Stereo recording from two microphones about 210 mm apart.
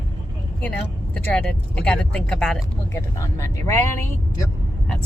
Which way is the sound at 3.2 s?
15° left (ahead or behind).